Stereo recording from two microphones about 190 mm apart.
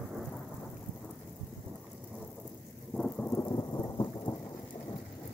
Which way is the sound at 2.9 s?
5° left (ahead or behind).